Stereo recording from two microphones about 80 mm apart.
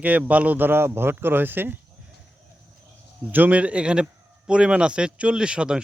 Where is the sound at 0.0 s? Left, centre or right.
Centre.